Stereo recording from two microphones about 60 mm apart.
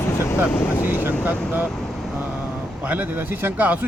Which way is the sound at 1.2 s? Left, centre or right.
Right.